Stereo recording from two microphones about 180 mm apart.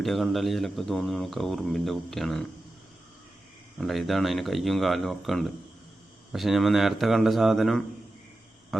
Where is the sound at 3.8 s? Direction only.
Centre (ahead or behind).